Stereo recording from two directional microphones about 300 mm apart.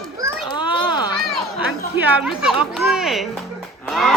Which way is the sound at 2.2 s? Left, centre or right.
Centre.